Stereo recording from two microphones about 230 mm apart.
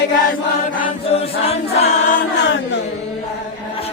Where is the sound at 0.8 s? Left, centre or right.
Left.